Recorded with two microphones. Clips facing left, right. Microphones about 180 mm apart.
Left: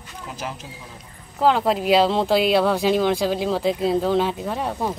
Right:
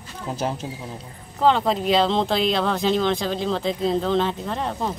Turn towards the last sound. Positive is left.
turn(degrees=10)  # may be behind; listen again after turning